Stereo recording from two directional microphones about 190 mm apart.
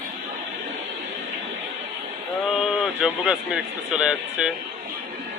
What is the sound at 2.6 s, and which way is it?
A man's voice, 5° right (ahead or behind).